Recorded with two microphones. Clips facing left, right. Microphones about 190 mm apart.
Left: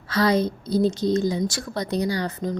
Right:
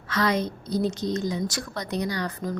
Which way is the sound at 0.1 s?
30° left (ahead or behind).